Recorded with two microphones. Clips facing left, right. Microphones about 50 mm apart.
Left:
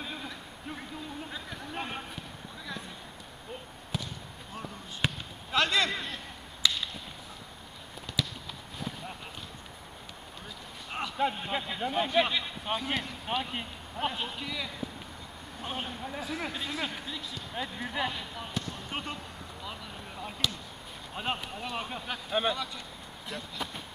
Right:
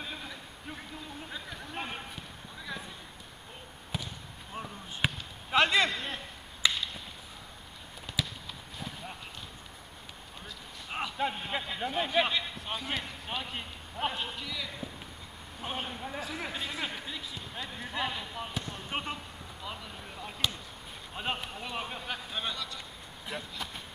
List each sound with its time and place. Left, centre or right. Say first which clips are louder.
0.0 s a sound: left 2 dB; centre
3.9 s basketball bounce: left 2 dB; centre
5.5 s a sound: right 2 dB; centre
8.1 s clip-clop: left 1 dB; centre
10.9 s a man's voice: left 2 dB; centre
13.9 s speech: left 1 dB; centre
14.4 s speech: left 2 dB; centre
15.6 s speech: even; centre
17.6 s speech: left 3 dB; centre
18.1 s speech: even; centre
20.2 s basketball bounce: left 3 dB; centre
21.1 s speech: left 1 dB; centre
22.3 s speech: left 10 dB; centre
23.3 s speech: right 1 dB; centre